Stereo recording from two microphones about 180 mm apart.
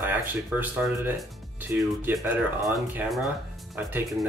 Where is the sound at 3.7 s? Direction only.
Centre (ahead or behind).